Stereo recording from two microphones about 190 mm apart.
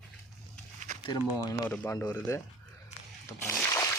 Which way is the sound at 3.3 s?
15° left (ahead or behind).